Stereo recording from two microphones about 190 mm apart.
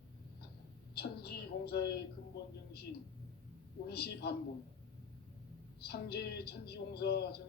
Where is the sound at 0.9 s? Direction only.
55° left (ahead or behind).